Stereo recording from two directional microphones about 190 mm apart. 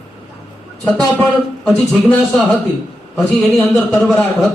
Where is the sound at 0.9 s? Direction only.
10° left (ahead or behind).